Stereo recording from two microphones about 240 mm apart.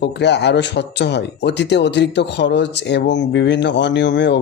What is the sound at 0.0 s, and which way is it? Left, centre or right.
Speech, left.